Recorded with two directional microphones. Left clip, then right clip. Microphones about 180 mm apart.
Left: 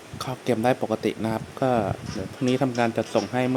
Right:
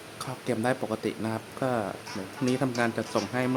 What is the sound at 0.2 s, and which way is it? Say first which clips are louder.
Speech: left 6 dB; 25° left (ahead or behind).